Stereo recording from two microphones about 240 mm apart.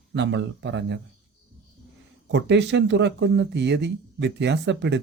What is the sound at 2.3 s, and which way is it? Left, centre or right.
Speech, right.